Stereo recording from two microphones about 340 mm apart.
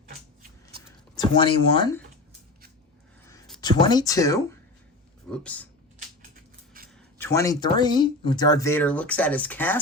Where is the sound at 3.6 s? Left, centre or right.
Centre.